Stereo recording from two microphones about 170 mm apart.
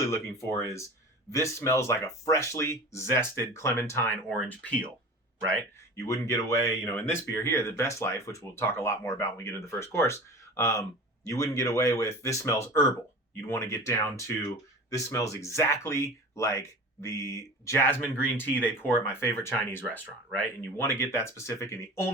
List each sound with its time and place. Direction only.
0.0 s speech: 15° left (ahead or behind)
6.0 s speech: 15° left (ahead or behind)